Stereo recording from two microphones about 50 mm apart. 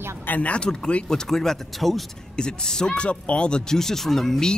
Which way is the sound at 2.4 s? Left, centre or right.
Centre.